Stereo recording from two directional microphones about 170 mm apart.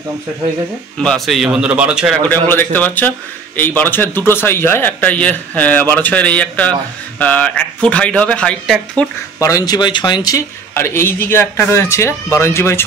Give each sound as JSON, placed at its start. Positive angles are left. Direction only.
{"t": 0.9, "sound": "a man's voice", "side_deg": 5}
{"t": 2.2, "sound": "a man's voice", "side_deg": 10}
{"t": 9.4, "sound": "a man's voice", "side_deg": 20}